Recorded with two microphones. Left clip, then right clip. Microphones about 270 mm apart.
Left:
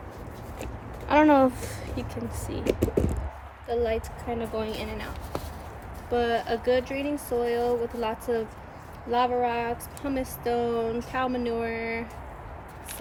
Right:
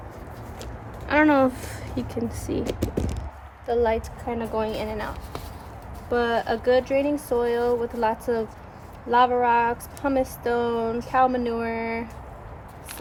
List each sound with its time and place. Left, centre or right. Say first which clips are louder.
0.6 s a sound: left 2 dB; centre
2.0 s speech: right 5 dB; centre
2.5 s speech: right 9 dB; right
3.7 s speech: right 5 dB; right
6.1 s speech: right 3 dB; centre